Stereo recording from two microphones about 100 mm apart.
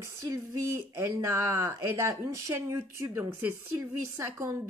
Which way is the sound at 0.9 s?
30° right (ahead or behind).